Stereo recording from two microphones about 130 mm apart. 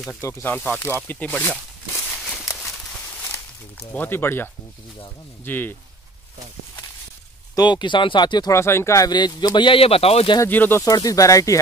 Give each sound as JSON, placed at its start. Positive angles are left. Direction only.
{"t": 0.2, "sound": "speech", "side_deg": 20}
{"t": 2.2, "sound": "a sound", "side_deg": 0}
{"t": 3.9, "sound": "speech", "side_deg": 15}
{"t": 7.5, "sound": "speech", "side_deg": 35}
{"t": 8.5, "sound": "speech", "side_deg": 20}
{"t": 10.4, "sound": "speech", "side_deg": 15}
{"t": 10.8, "sound": "speech", "side_deg": 30}